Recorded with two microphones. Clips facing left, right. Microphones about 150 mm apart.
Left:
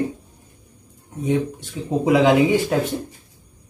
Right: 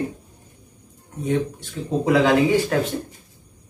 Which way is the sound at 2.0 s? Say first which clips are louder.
Left 2 dB; 15° left (ahead or behind).